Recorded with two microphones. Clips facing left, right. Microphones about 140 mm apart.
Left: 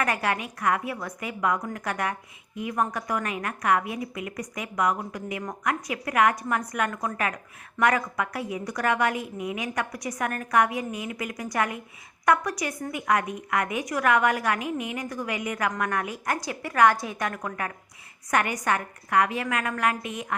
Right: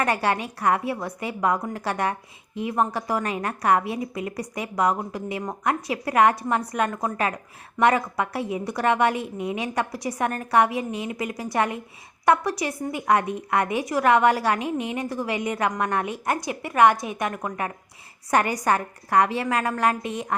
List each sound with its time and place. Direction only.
0.0 s a woman's voice: 30° right (ahead or behind)
18.3 s a woman's voice: 35° right (ahead or behind)